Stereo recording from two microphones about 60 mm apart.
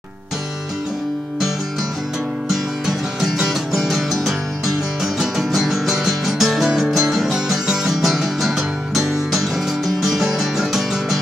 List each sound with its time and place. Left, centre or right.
2.4 s music: centre